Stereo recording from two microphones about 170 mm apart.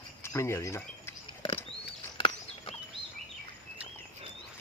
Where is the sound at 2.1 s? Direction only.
30° left (ahead or behind).